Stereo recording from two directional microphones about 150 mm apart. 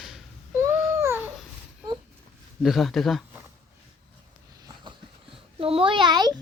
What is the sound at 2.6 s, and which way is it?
Speech, centre (ahead or behind).